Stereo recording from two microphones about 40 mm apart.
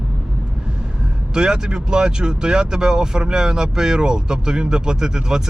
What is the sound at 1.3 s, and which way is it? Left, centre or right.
Speech, right.